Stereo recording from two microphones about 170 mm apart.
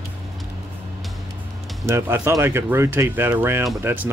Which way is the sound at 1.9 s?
15° right (ahead or behind).